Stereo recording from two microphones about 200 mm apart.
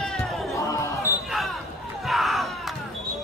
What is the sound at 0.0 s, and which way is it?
Music, centre (ahead or behind).